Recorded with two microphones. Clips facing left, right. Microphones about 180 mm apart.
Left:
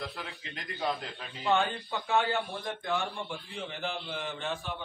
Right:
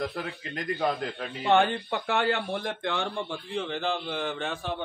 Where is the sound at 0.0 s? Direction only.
45° right (ahead or behind).